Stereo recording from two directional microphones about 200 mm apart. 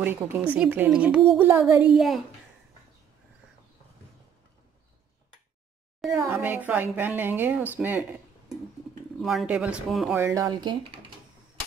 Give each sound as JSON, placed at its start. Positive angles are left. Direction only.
{"t": 0.0, "sound": "a woman's voice", "side_deg": -10}
{"t": 6.0, "sound": "a woman's voice", "side_deg": -10}
{"t": 9.2, "sound": "speech", "side_deg": 0}
{"t": 10.1, "sound": "speech", "side_deg": -15}